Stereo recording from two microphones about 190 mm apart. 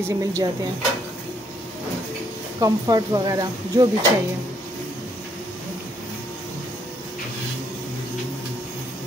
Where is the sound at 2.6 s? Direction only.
20° right (ahead or behind).